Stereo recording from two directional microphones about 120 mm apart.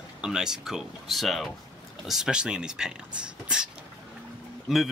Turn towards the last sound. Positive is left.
turn(degrees=0)  # may be behind; listen again after turning